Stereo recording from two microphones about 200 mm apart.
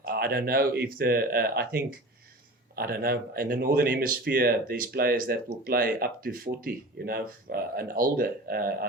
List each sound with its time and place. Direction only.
0.0 s speech: 50° right (ahead or behind)